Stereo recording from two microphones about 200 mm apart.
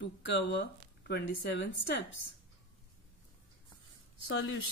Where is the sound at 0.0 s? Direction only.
60° left (ahead or behind).